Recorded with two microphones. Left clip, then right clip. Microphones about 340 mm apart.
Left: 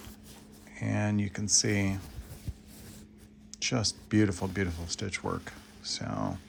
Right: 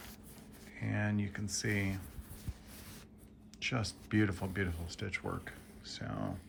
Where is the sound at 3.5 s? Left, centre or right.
Centre.